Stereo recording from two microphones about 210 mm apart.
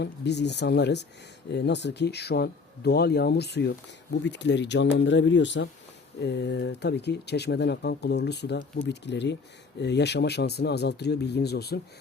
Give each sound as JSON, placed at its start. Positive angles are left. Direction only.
{"t": 0.0, "sound": "speech", "side_deg": 55}